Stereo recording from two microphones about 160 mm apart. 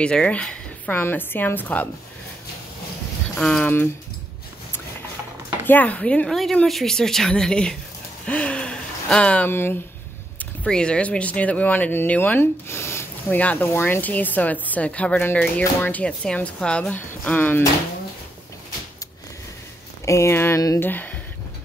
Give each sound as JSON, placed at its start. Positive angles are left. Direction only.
{"t": 0.0, "sound": "speech", "side_deg": 5}
{"t": 3.3, "sound": "speech", "side_deg": 5}
{"t": 5.7, "sound": "a woman's voice", "side_deg": 10}
{"t": 20.1, "sound": "speech", "side_deg": 15}